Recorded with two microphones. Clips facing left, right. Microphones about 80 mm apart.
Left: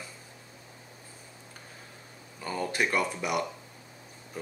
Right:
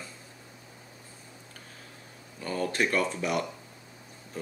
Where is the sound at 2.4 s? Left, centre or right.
Centre.